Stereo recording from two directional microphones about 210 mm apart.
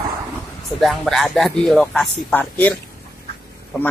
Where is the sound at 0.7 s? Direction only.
Centre (ahead or behind).